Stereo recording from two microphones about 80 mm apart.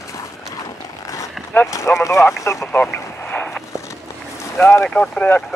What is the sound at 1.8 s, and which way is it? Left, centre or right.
Speech, left.